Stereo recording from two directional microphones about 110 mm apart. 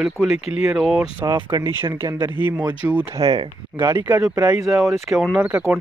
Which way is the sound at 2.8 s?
25° right (ahead or behind).